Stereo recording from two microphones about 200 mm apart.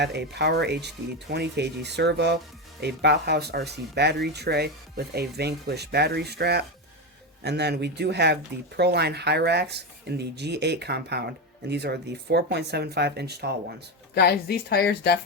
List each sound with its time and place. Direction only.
0.0 s speech: 55° right (ahead or behind)
14.2 s a woman's voice: 50° left (ahead or behind)